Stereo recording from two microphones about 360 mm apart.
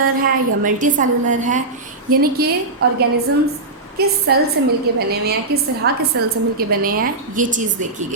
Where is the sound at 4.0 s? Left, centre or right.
Right.